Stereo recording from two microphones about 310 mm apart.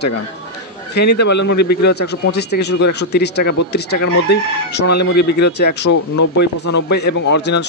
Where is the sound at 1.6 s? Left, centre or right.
Left.